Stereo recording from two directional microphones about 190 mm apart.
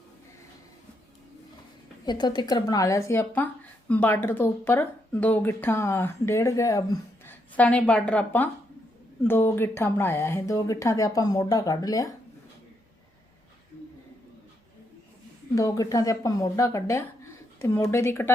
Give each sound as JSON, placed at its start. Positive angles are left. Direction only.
{"t": 2.0, "sound": "speech", "side_deg": 20}
{"t": 15.5, "sound": "speech", "side_deg": 15}